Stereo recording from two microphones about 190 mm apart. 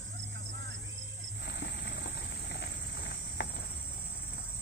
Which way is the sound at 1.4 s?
60° left (ahead or behind).